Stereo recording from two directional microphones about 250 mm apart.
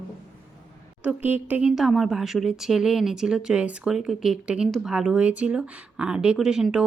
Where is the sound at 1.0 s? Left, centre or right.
Centre.